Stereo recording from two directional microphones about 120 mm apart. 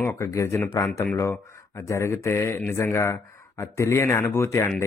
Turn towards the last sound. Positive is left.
turn(degrees=25)  # may be behind; listen again after turning